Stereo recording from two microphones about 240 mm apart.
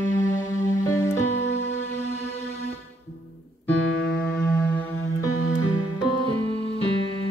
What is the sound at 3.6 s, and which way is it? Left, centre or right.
Music, centre.